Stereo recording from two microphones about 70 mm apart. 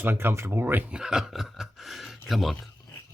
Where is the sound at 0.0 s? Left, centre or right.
Right.